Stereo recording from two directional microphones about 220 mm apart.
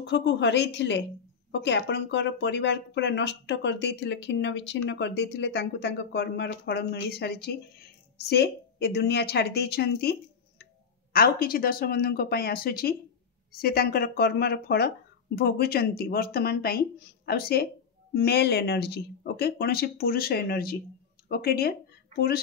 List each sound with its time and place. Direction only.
0.0 s speech: 50° left (ahead or behind)
11.1 s speech: 40° left (ahead or behind)